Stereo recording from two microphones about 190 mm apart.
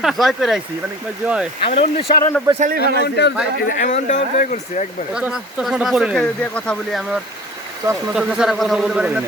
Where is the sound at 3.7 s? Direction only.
40° left (ahead or behind).